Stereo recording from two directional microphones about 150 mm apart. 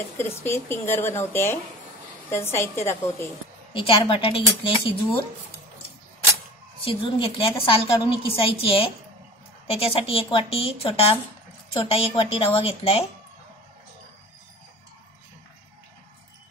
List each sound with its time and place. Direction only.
0.2 s a woman's voice: 15° left (ahead or behind)
3.7 s a woman's voice: 35° left (ahead or behind)
6.8 s a woman's voice: 35° left (ahead or behind)